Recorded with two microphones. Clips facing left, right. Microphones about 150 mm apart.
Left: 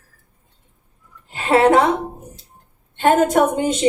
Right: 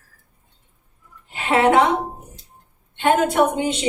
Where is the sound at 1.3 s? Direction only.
40° left (ahead or behind).